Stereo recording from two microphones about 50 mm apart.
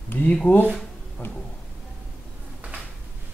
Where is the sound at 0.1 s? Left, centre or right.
Left.